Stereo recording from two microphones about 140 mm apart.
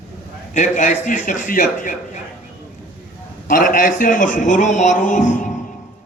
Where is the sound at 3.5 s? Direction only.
75° left (ahead or behind).